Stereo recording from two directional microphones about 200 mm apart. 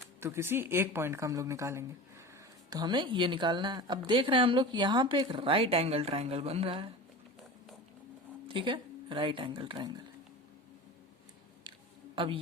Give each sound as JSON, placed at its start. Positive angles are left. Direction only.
{"t": 0.2, "sound": "speech", "side_deg": -10}
{"t": 8.4, "sound": "speech", "side_deg": -25}
{"t": 12.1, "sound": "a woman's voice", "side_deg": -25}